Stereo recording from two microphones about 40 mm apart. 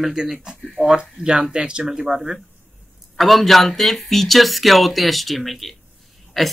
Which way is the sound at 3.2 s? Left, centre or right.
Centre.